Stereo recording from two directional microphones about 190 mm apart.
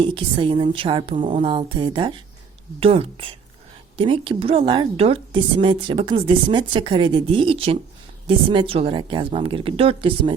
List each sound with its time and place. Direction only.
0.0 s a woman's voice: 25° right (ahead or behind)